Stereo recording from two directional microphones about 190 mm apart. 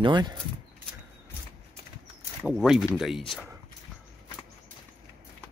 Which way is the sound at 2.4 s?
Centre (ahead or behind).